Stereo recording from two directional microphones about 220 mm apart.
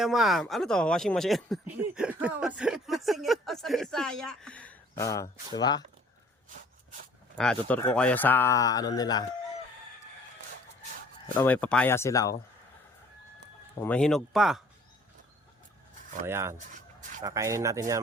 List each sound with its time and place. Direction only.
0.0 s speech: centre (ahead or behind); by 5.8 s 20° left (ahead or behind)
7.3 s speech: 5° left (ahead or behind)
11.3 s speech: 5° left (ahead or behind)
13.7 s speech: 5° left (ahead or behind)
16.2 s speech: 10° right (ahead or behind)
16.6 s a sound: 35° right (ahead or behind)
17.2 s speech: 15° right (ahead or behind)